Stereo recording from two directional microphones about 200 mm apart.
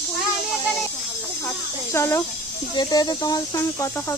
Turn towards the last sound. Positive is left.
turn(degrees=20)  # may be behind; listen again after turning